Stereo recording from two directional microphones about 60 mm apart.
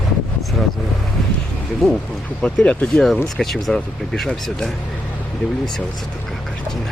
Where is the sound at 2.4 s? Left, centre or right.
Centre.